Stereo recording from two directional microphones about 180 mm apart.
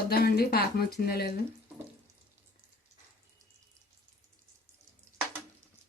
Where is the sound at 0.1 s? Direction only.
60° left (ahead or behind).